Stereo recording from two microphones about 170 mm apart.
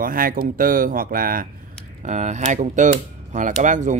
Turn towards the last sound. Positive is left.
turn(degrees=-45)  # may be behind; listen again after turning